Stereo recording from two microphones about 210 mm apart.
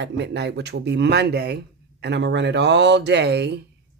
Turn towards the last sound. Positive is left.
turn(degrees=-55)  # may be behind; listen again after turning